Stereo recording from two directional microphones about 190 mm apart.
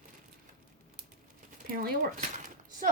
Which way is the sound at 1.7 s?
50° right (ahead or behind).